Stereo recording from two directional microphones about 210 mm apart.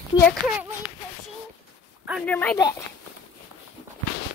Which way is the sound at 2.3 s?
5° left (ahead or behind).